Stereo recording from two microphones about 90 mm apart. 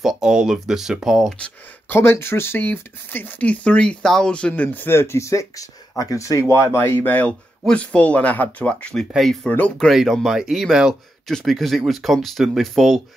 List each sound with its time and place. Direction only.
0.0 s speech: 5° right (ahead or behind)
2.0 s speech: 30° left (ahead or behind); by 9.0 s 15° left (ahead or behind)
9.1 s speech: centre (ahead or behind)
9.5 s speech: 15° left (ahead or behind)
9.8 s speech: centre (ahead or behind)